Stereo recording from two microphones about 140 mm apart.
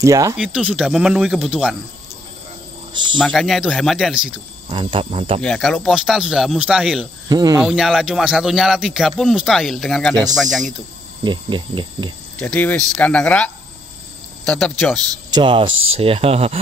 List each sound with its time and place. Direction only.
0.0 s speech: 25° right (ahead or behind)
0.4 s speech: 5° right (ahead or behind)
2.9 s cricket: 35° right (ahead or behind)
3.2 s speech: 5° left (ahead or behind)
4.6 s cricket: 40° right (ahead or behind)
5.4 s speech: 5° left (ahead or behind)
7.2 s speech: 30° right (ahead or behind)
7.6 s speech: 5° right (ahead or behind)
11.2 s cricket: 35° right (ahead or behind)
12.4 s speech: 10° left (ahead or behind)
15.3 s speech: 35° right (ahead or behind)